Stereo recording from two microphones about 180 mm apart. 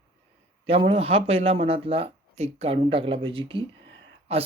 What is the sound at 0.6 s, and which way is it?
Speech, 30° right (ahead or behind).